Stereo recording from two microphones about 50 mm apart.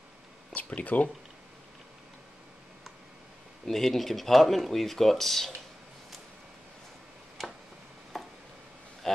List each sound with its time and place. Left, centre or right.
0.6 s speech: left
3.6 s speech: centre
7.4 s a sound: centre